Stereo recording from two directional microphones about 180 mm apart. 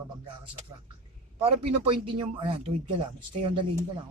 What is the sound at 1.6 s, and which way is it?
Speech, 30° right (ahead or behind).